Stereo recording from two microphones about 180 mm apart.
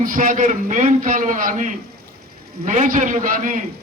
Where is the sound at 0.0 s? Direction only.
50° right (ahead or behind).